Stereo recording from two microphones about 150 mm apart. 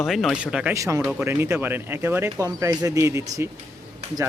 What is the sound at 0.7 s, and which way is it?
Speech, 20° right (ahead or behind).